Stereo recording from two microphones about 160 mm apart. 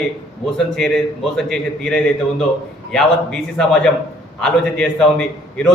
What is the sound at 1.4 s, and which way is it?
Speech, centre (ahead or behind).